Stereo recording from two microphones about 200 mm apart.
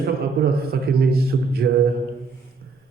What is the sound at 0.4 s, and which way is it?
A man's voice, 50° right (ahead or behind).